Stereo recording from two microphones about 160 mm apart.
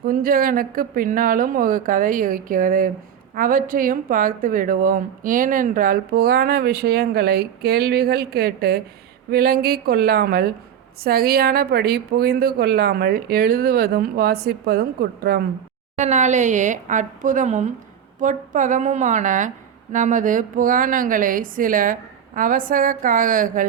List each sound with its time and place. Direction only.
0.0 s speech: 65° right (ahead or behind)
16.0 s speech: 50° right (ahead or behind)